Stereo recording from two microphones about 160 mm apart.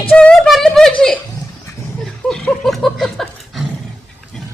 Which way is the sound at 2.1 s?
5° left (ahead or behind).